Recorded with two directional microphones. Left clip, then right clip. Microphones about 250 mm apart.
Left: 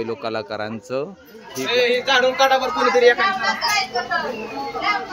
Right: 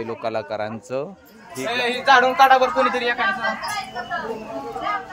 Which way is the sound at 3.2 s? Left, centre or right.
Left.